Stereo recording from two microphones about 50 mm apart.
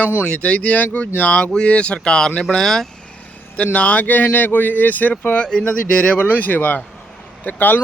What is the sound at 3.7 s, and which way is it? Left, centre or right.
Speech, left.